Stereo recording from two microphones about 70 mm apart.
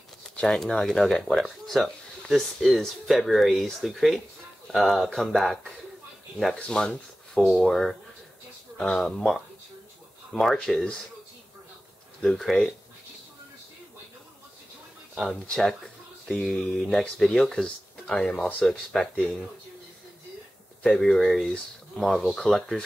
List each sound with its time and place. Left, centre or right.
0.4 s speech: centre
12.2 s speech: centre
15.3 s speech: centre
20.8 s speech: centre